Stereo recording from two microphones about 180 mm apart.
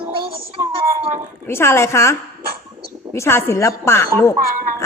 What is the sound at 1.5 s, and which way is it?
A woman's voice, 15° left (ahead or behind).